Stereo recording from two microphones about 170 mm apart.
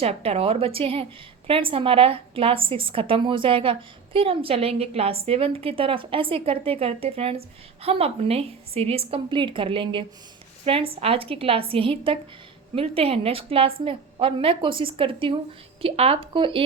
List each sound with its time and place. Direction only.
0.0 s a woman's voice: 35° right (ahead or behind)